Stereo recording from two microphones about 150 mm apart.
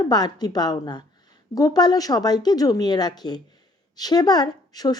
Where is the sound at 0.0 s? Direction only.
25° left (ahead or behind).